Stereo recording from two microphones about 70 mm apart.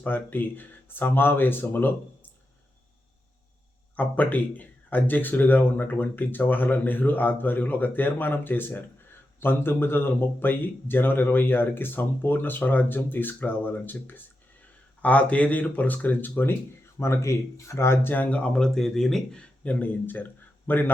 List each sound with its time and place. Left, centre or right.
0.0 s speech: left
3.9 s speech: left
17.0 s speech: left; by 19.4 s centre
19.4 s a man's voice: left